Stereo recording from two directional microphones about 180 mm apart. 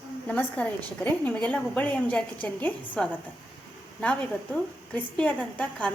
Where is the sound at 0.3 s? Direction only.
10° left (ahead or behind).